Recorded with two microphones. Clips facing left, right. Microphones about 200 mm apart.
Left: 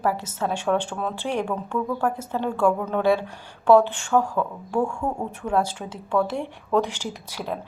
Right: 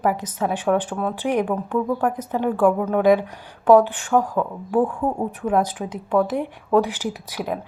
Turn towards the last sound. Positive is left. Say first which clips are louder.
# right 4 dB
turn(degrees=-10)  # may be behind; listen again after turning